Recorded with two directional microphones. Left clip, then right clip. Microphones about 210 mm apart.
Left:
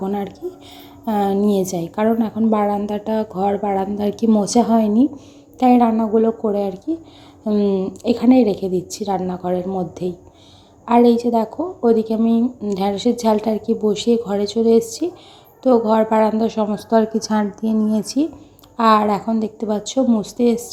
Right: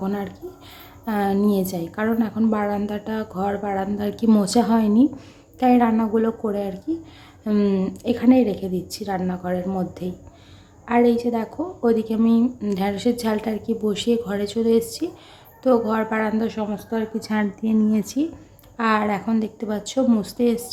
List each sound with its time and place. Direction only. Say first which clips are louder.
0.0 s a woman's voice: left 4 dB; 10° left (ahead or behind)
8.0 s a woman's voice: left 3 dB; 10° left (ahead or behind)
10.8 s a woman's voice: left 5 dB; 10° left (ahead or behind)
12.3 s speech: left 2 dB; 25° right (ahead or behind)
12.7 s a woman's voice: left 5 dB; 10° left (ahead or behind)
17.3 s speech: right 1 dB; 10° right (ahead or behind)
18.2 s a woman's voice: left 4 dB; 15° left (ahead or behind)